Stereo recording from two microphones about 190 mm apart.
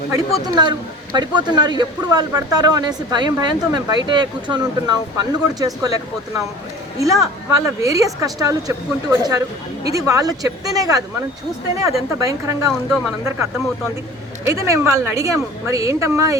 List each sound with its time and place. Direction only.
0.4 s a man's voice: 20° right (ahead or behind)
7.0 s a man's voice: 15° right (ahead or behind)
14.4 s speech: 15° right (ahead or behind)